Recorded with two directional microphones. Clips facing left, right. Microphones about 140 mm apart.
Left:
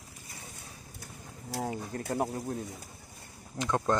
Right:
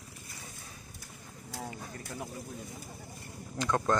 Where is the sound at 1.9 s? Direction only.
55° left (ahead or behind).